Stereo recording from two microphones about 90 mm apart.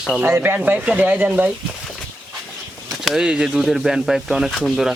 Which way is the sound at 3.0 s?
5° right (ahead or behind).